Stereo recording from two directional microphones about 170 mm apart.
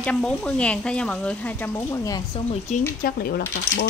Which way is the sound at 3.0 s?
55° left (ahead or behind).